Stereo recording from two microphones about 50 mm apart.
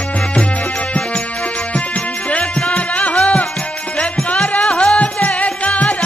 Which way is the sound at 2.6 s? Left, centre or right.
Left.